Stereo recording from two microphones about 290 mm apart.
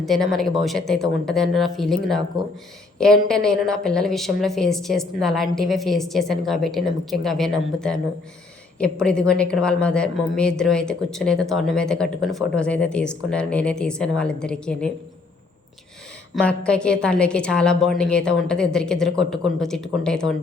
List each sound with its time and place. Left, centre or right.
0.0 s a woman's voice: centre
8.8 s a woman's voice: centre
16.3 s a woman's voice: centre